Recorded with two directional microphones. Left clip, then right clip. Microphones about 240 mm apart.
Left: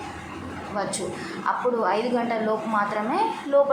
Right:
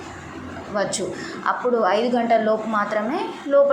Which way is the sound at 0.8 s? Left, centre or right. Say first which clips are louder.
Right 5 dB; centre.